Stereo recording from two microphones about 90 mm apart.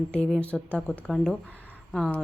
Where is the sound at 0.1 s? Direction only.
10° left (ahead or behind).